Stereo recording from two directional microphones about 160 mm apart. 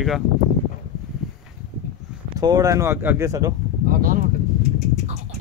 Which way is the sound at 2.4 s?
20° right (ahead or behind).